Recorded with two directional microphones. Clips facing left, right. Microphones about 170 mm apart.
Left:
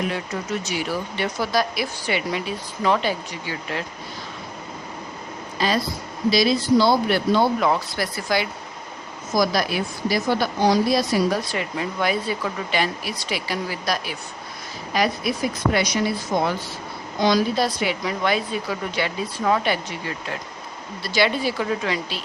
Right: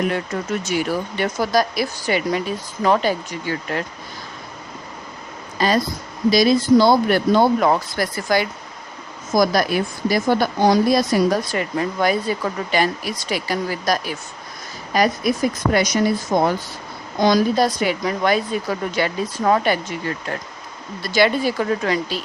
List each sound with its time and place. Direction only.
0.6 s a woman's voice: 50° right (ahead or behind)
5.5 s a woman's voice: 45° right (ahead or behind)